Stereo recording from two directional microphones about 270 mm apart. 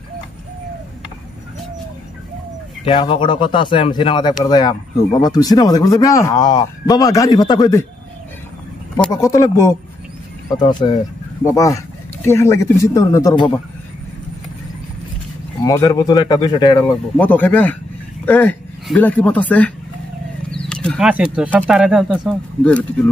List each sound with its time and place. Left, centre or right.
2.8 s speech: centre
8.9 s speech: centre
15.6 s speech: centre